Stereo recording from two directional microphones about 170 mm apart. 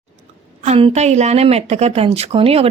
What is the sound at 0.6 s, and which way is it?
Speech, 40° right (ahead or behind).